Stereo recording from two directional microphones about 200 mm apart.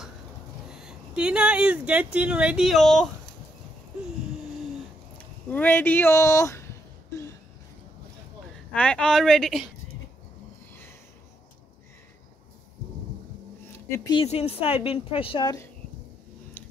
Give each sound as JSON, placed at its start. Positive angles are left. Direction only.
{"t": 0.7, "sound": "a woman's voice", "side_deg": -5}
{"t": 5.1, "sound": "speech", "side_deg": 10}
{"t": 8.7, "sound": "a woman's voice", "side_deg": 5}
{"t": 10.7, "sound": "a sound", "side_deg": 10}
{"t": 13.7, "sound": "a sound", "side_deg": 15}
{"t": 14.2, "sound": "a woman's voice", "side_deg": 30}